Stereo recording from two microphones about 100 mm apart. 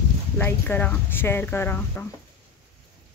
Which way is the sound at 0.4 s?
20° left (ahead or behind).